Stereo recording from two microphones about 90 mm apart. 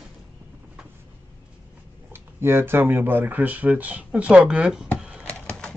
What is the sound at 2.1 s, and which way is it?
Speech, 25° right (ahead or behind).